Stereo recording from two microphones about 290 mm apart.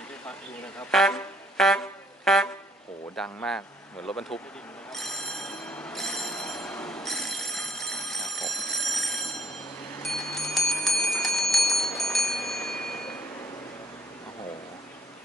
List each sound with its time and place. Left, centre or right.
0.9 s brass instrument: centre
3.2 s a man's voice: centre
4.9 s train: centre
10.0 s clock: centre